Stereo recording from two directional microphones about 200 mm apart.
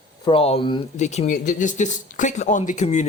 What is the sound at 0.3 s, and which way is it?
Speech, 30° left (ahead or behind).